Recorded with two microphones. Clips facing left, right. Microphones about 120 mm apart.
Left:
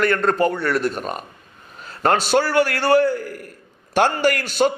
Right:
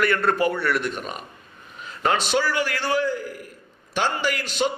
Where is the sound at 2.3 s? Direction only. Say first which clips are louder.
Left 6 dB; 50° left (ahead or behind).